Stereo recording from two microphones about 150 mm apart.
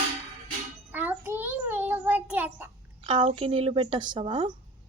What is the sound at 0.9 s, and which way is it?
Child singing, 10° right (ahead or behind).